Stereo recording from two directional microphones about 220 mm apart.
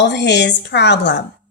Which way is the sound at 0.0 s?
50° left (ahead or behind).